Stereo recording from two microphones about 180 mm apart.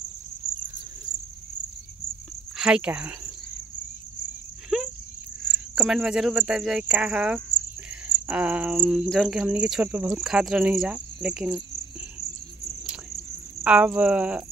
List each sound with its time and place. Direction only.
2.5 s speech: 5° right (ahead or behind)
5.4 s cricket: 10° right (ahead or behind)
8.3 s speech: 10° right (ahead or behind)
12.8 s cricket: centre (ahead or behind)